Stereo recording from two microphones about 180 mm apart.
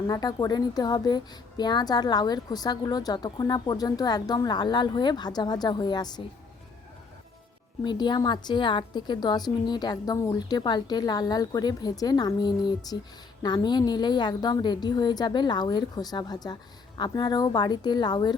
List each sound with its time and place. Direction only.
0.1 s speech: 20° left (ahead or behind)
7.9 s speech: 25° left (ahead or behind)